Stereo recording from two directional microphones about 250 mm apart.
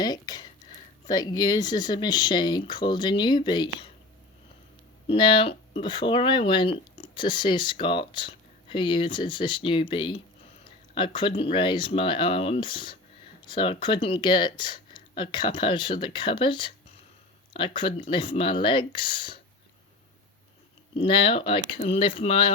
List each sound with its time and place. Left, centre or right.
0.0 s speech: centre
5.0 s speech: centre
20.9 s speech: left